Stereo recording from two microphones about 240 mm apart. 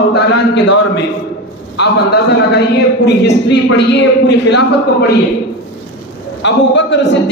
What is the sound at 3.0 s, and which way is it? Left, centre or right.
A man's voice, left.